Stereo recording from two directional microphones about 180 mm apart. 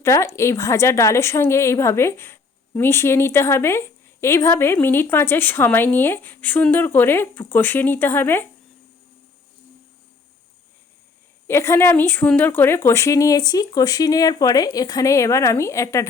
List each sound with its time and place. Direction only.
0.0 s a woman's voice: 15° left (ahead or behind)
11.4 s a woman's voice: 15° left (ahead or behind)